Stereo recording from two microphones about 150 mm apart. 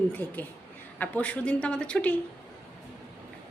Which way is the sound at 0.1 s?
10° left (ahead or behind).